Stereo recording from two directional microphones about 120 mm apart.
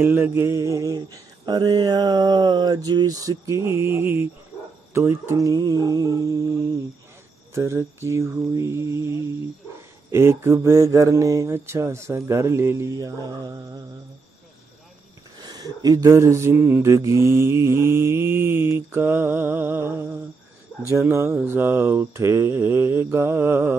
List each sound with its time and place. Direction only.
0.0 s mantra: 20° right (ahead or behind)
10.1 s mantra: 20° right (ahead or behind)
15.4 s mantra: 35° right (ahead or behind)